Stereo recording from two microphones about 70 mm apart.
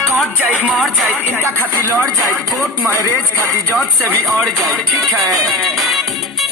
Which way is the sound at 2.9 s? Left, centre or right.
Left.